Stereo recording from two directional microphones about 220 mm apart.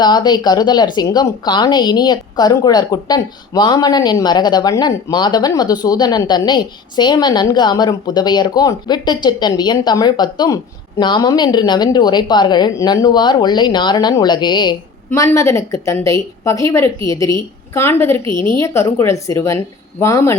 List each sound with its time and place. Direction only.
0.0 s a woman's voice: 20° left (ahead or behind)